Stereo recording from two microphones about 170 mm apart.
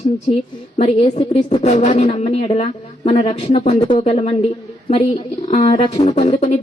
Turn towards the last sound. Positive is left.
turn(degrees=40)  # may be behind; listen again after turning